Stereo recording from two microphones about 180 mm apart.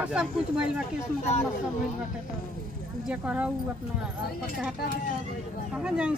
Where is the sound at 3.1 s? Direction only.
5° right (ahead or behind).